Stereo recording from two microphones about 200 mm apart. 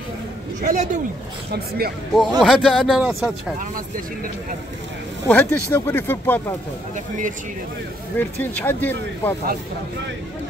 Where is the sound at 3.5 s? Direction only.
45° right (ahead or behind).